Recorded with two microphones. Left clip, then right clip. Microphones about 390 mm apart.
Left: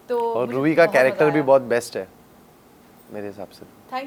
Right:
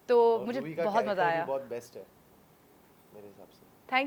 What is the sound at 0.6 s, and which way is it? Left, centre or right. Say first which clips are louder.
Speech: left 17 dB; left.